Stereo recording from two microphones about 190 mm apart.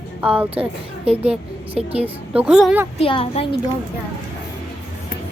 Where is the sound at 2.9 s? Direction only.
30° left (ahead or behind).